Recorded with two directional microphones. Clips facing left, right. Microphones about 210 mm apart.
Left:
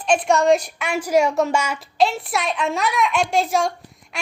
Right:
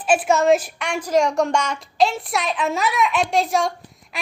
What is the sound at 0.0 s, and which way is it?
A woman's voice, 5° right (ahead or behind).